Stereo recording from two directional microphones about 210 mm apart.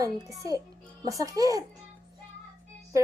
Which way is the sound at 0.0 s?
15° right (ahead or behind).